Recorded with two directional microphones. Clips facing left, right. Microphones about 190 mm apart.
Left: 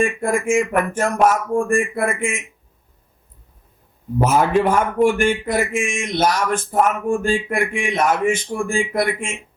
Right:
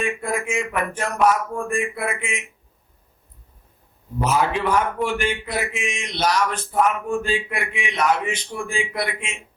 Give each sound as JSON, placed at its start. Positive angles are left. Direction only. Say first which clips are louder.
{"t": 0.0, "sound": "a man's voice", "louder": "left 6 dB", "side_deg": 50}
{"t": 4.2, "sound": "a man's voice", "louder": "left 5 dB", "side_deg": 50}